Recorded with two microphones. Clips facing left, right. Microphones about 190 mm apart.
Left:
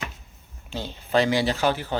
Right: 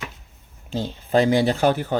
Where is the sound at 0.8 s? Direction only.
50° right (ahead or behind).